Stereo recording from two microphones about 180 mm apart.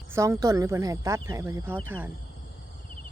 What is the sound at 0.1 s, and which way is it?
Speech, 15° right (ahead or behind).